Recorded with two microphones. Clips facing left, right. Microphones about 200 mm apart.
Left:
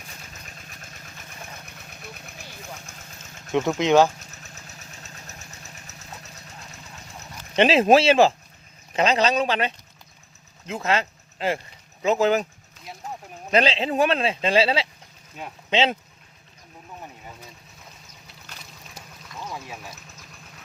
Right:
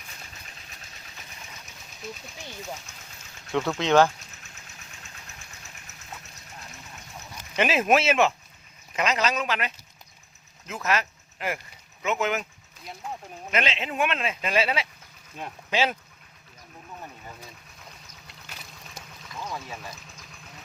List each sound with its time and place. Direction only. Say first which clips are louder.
0.4 s vehicle: left 4 dB; 50° left (ahead or behind)
1.6 s vehicle: right 2 dB; 60° left (ahead or behind)
3.5 s speech: left 3 dB; 15° left (ahead or behind)
4.4 s engine: left 5 dB; 40° left (ahead or behind)
7.5 s speech: left 6 dB; 30° left (ahead or behind)
13.5 s speech: left 7 dB; 35° left (ahead or behind)
19.5 s a sound: even; 10° left (ahead or behind)